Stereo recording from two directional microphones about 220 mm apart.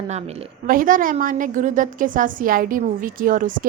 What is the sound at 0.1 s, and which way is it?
A woman's voice, 30° right (ahead or behind).